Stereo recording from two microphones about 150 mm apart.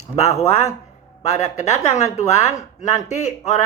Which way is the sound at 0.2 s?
45° left (ahead or behind).